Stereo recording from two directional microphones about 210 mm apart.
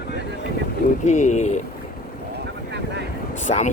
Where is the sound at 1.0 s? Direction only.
35° left (ahead or behind).